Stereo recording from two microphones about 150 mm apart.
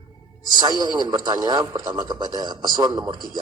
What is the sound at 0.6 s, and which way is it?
A man's voice, 30° right (ahead or behind).